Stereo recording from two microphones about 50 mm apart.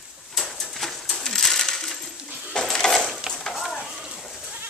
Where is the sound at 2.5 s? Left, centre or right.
Centre.